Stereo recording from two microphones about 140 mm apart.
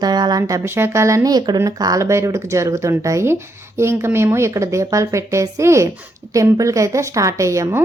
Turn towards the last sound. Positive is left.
turn(degrees=-20)  # may be behind; listen again after turning